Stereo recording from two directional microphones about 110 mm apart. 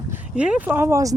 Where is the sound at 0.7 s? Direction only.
25° right (ahead or behind).